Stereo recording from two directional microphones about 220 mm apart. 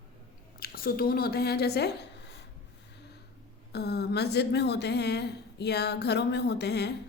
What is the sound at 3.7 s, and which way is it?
A woman's voice, 45° left (ahead or behind).